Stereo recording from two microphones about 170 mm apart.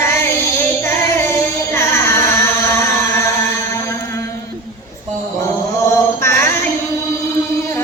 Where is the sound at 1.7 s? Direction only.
15° left (ahead or behind).